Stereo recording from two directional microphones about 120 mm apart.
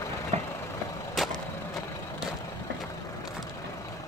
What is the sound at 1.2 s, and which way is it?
Vehicle, centre (ahead or behind).